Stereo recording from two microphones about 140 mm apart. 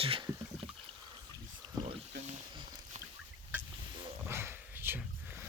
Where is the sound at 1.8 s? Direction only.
55° right (ahead or behind).